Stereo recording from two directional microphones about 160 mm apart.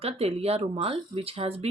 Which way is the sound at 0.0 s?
40° right (ahead or behind).